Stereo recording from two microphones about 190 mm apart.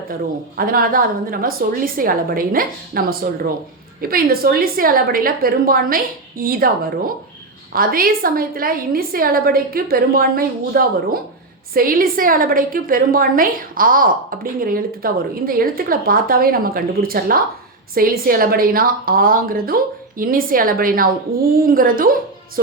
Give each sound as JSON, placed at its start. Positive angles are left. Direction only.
{"t": 0.5, "sound": "a woman's voice", "side_deg": -50}